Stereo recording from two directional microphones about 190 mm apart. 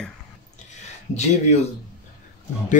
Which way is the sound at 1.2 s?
35° left (ahead or behind).